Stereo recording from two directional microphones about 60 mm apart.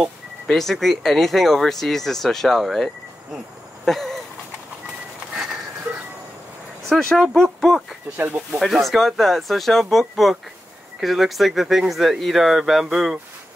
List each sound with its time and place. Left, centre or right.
0.5 s speech: centre
3.8 s a sound: centre
6.9 s speech: centre
7.4 s speech: centre
8.2 s speech: right
8.5 s speech: centre